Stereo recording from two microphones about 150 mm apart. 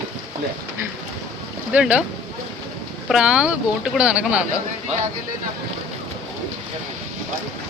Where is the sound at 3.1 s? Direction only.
5° right (ahead or behind).